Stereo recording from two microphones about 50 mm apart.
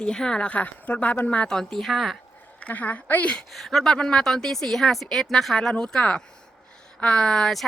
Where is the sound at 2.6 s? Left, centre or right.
Left.